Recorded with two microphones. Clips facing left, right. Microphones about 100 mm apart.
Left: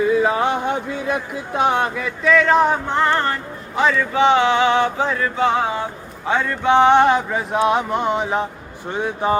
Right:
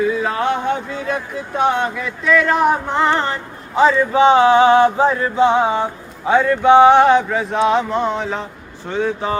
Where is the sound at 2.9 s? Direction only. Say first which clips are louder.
Right 1 dB; 15° right (ahead or behind).